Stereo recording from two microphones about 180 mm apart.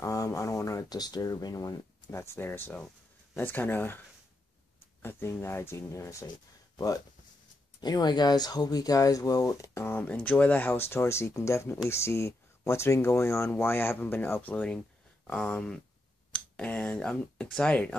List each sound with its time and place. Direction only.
0.0 s speech: 20° left (ahead or behind)
5.0 s speech: 15° left (ahead or behind)
7.8 s speech: 25° left (ahead or behind); by 17.9 s 5° left (ahead or behind)